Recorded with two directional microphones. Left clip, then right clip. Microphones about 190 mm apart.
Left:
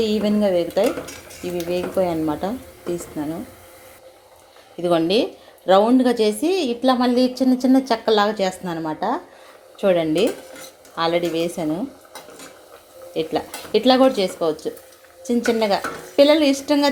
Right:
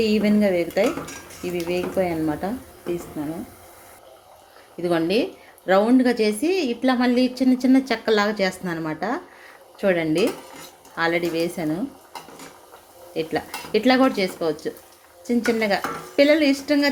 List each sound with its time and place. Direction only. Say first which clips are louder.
0.0 s a woman's voice: left 1 dB; 5° right (ahead or behind)
4.8 s a woman's voice: left 3 dB; centre (ahead or behind)
13.1 s a woman's voice: left 2 dB; centre (ahead or behind)